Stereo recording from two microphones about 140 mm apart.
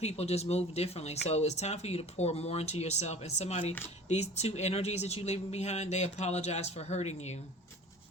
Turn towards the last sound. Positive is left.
turn(degrees=50)  # may be behind; listen again after turning